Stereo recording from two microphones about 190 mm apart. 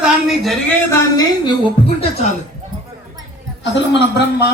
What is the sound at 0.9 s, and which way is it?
Speech, 20° left (ahead or behind).